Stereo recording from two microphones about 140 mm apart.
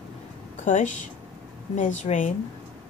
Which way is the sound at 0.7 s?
60° left (ahead or behind).